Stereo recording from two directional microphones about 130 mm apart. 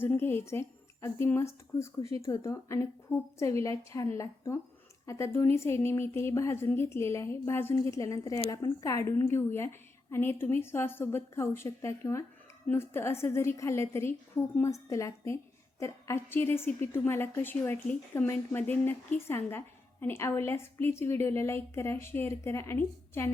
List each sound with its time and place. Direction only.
0.0 s a woman's voice: 15° left (ahead or behind)